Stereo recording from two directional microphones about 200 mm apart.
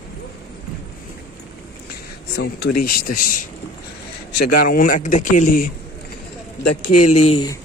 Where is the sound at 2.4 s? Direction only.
50° left (ahead or behind).